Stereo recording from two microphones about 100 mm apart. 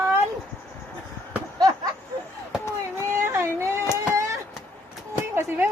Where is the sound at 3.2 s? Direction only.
25° right (ahead or behind).